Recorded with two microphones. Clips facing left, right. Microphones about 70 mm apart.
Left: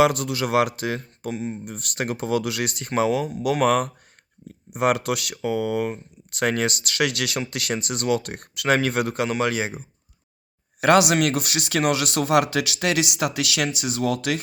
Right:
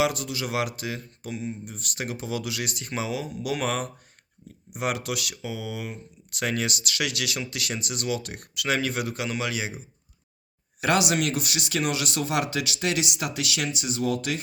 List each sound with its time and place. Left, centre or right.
0.0 s speech: left
1.3 s speech: left
1.6 s speech: left
10.8 s speech: left